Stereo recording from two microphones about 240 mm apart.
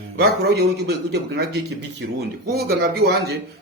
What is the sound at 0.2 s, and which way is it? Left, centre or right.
A man's voice, right.